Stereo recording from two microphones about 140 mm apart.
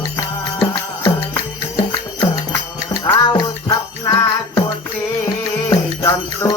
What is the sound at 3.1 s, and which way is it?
Music, 30° left (ahead or behind).